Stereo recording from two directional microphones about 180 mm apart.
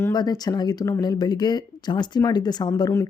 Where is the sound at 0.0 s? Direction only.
20° left (ahead or behind).